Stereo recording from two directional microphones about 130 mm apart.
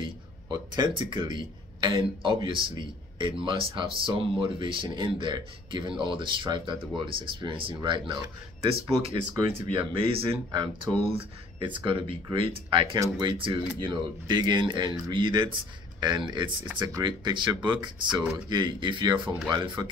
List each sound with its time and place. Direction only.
0.0 s speech: 35° right (ahead or behind)
9.0 s speech: 45° right (ahead or behind)